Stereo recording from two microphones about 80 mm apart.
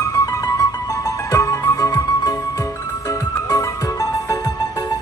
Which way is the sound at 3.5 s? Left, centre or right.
Left.